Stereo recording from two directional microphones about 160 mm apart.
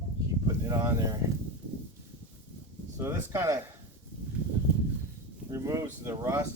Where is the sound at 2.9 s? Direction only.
20° right (ahead or behind).